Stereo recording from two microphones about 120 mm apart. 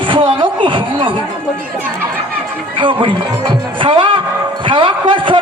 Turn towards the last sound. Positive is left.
turn(degrees=-45)  # may be behind; listen again after turning